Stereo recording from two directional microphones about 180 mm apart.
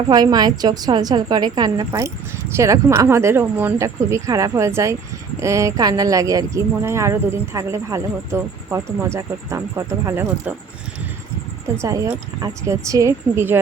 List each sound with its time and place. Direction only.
0.1 s a woman's voice: 20° right (ahead or behind)
11.8 s speech: 15° right (ahead or behind)